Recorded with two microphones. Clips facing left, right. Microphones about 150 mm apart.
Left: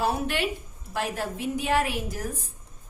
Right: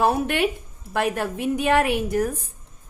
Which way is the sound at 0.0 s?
55° right (ahead or behind).